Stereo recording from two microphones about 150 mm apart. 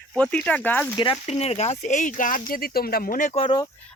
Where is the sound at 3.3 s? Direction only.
40° left (ahead or behind).